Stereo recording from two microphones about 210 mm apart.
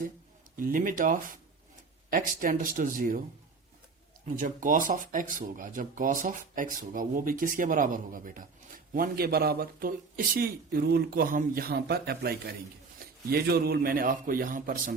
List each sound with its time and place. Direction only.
0.5 s speech: 40° right (ahead or behind)
4.4 s a man's voice: 40° right (ahead or behind)